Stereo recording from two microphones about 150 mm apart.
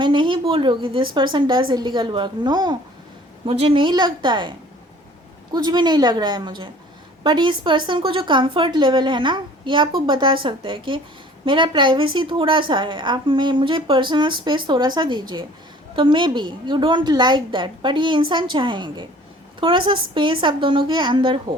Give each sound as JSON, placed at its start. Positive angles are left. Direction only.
{"t": 0.0, "sound": "a woman's voice", "side_deg": -30}
{"t": 3.4, "sound": "a woman's voice", "side_deg": -40}